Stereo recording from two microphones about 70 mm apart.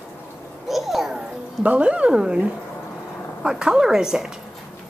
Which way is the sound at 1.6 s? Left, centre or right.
Centre.